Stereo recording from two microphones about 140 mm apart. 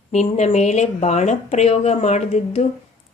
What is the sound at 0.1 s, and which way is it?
A woman's voice, 55° left (ahead or behind).